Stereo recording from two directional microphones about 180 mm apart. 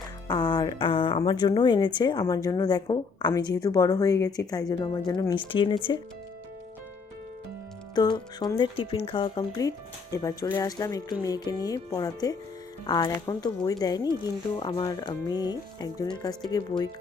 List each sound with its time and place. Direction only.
0.3 s a woman's voice: 25° left (ahead or behind)
7.9 s a woman's voice: 25° left (ahead or behind)